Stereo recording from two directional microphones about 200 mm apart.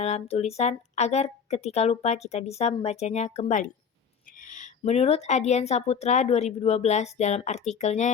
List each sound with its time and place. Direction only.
0.0 s speech: 30° left (ahead or behind)